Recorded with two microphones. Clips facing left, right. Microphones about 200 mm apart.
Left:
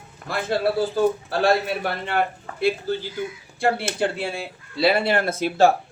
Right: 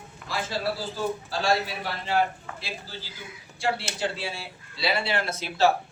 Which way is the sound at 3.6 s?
55° left (ahead or behind).